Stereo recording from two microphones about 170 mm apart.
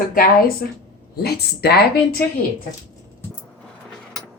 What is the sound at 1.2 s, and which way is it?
Speech, 70° left (ahead or behind).